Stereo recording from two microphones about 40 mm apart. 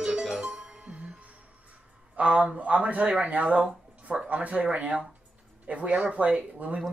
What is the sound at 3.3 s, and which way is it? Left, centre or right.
Speech, right.